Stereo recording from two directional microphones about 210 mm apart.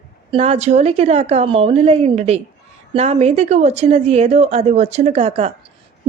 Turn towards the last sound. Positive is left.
turn(degrees=-30)  # may be behind; listen again after turning